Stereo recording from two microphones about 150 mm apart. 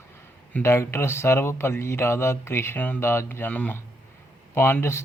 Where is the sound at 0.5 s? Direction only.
15° left (ahead or behind).